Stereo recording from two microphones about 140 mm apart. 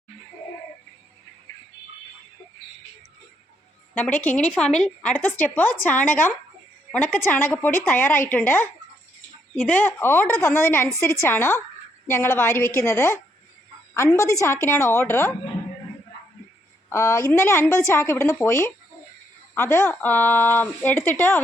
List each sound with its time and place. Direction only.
3.9 s a woman's voice: 10° left (ahead or behind)
16.9 s a woman's voice: 20° left (ahead or behind)